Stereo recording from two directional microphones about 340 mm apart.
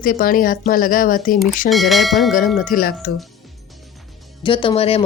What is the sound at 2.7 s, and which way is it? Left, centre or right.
Speech, left.